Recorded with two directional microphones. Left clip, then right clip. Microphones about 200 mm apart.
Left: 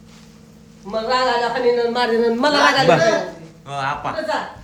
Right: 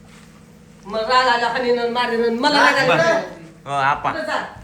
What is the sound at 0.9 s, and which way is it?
Speech, 35° left (ahead or behind).